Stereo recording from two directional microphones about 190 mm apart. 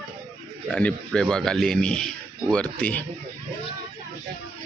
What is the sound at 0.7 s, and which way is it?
A man's voice, 5° left (ahead or behind).